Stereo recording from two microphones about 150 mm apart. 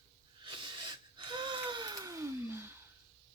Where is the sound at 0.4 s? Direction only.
30° right (ahead or behind); by 2.7 s 15° right (ahead or behind).